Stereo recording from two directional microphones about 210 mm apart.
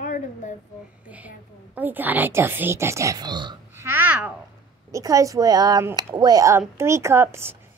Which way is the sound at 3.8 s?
10° right (ahead or behind).